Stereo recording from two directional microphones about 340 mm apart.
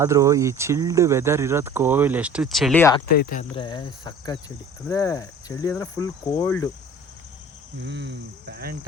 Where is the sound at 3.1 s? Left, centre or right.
Left; by 6.7 s centre.